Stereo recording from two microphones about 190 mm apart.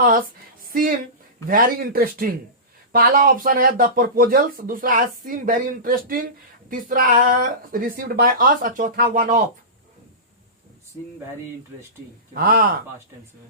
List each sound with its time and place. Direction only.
0.0 s a sound: 50° right (ahead or behind)
1.5 s speech: 45° right (ahead or behind)
12.3 s speech: 50° right (ahead or behind)